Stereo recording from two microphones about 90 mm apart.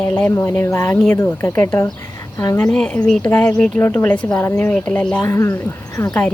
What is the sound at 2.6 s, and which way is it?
Speech, 15° left (ahead or behind).